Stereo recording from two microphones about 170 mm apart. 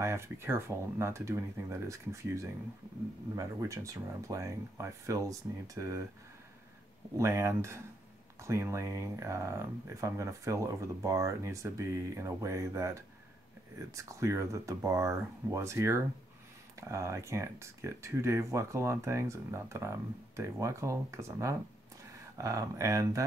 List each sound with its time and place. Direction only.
0.0 s speech: 15° right (ahead or behind)
7.2 s speech: 15° right (ahead or behind)